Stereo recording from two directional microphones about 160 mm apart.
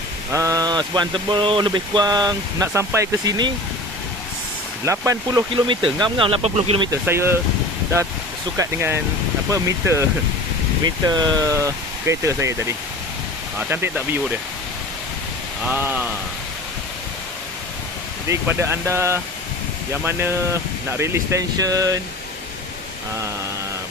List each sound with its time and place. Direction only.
0.3 s speech: 20° right (ahead or behind)
4.8 s speech: 20° right (ahead or behind)
5.7 s speech: 30° right (ahead or behind)
7.1 s speech: 15° right (ahead or behind)
8.5 s speech: 15° right (ahead or behind)
11.1 s speech: 25° right (ahead or behind)
15.6 s speech: 10° right (ahead or behind)
18.3 s speech: 15° right (ahead or behind)